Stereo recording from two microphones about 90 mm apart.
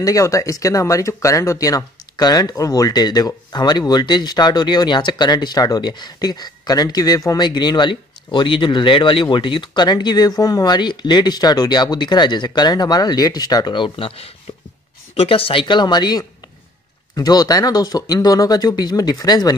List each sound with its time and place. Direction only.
0.0 s speech: 40° left (ahead or behind)
7.4 s speech: 55° left (ahead or behind)